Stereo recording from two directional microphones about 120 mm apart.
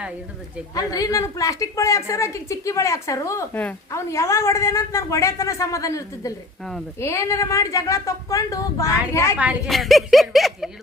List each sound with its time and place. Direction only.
0.8 s a woman's voice: 30° left (ahead or behind)
9.6 s speech: centre (ahead or behind)